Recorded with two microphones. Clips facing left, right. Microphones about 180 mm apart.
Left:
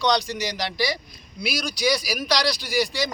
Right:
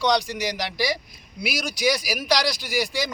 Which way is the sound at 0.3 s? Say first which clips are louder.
Even; 15° right (ahead or behind).